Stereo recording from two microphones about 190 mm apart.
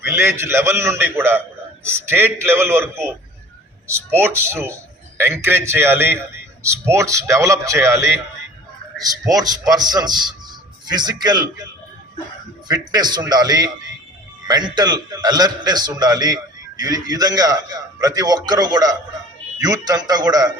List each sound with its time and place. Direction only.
0.0 s a man's voice: 15° right (ahead or behind)
9.2 s a man's voice: 20° right (ahead or behind)
12.6 s a man's voice: 20° right (ahead or behind)